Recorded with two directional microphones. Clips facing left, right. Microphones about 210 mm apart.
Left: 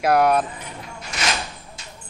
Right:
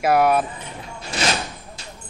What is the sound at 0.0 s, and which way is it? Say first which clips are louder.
Speech: even; 5° right (ahead or behind).